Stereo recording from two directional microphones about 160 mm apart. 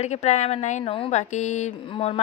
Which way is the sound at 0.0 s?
45° left (ahead or behind).